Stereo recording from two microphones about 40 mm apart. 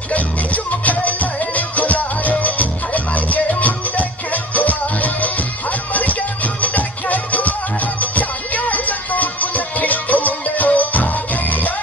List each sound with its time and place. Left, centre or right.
0.1 s music: left